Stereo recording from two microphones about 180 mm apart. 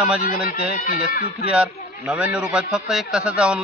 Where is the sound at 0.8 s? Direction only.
55° left (ahead or behind).